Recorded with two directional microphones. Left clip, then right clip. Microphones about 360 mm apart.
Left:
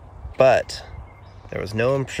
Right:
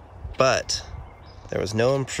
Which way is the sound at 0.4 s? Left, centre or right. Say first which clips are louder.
Left 5 dB; centre.